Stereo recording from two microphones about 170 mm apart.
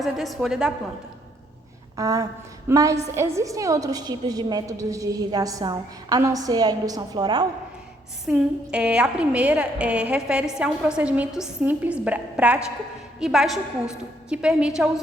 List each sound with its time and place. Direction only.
0.0 s a woman's voice: centre (ahead or behind)
2.0 s a woman's voice: 20° right (ahead or behind)
8.3 s a woman's voice: 5° right (ahead or behind)